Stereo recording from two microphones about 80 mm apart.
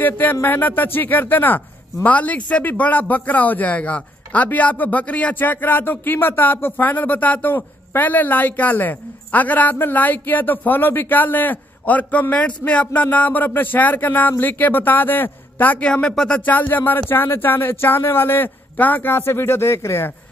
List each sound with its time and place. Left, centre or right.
0.0 s speech: left